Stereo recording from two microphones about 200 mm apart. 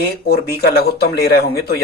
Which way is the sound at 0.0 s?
50° left (ahead or behind).